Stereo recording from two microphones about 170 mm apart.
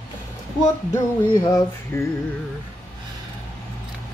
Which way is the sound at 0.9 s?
25° left (ahead or behind).